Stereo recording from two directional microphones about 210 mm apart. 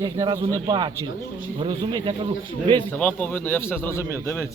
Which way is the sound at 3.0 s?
10° left (ahead or behind).